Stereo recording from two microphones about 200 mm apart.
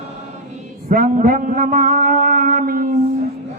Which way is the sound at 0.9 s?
40° right (ahead or behind).